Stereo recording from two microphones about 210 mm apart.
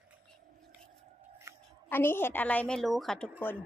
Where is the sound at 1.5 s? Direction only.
15° right (ahead or behind).